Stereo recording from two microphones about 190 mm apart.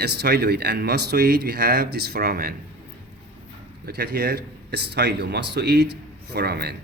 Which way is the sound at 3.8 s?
60° right (ahead or behind).